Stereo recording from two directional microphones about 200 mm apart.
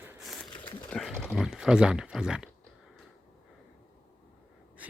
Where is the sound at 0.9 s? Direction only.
Centre (ahead or behind).